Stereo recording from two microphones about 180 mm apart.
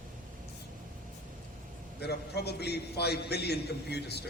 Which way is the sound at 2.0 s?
65° left (ahead or behind).